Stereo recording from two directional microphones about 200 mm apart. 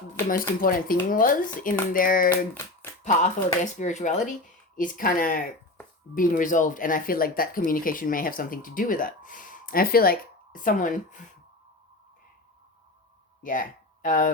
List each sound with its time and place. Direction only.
0.3 s speech: 45° left (ahead or behind)
13.4 s speech: 45° left (ahead or behind)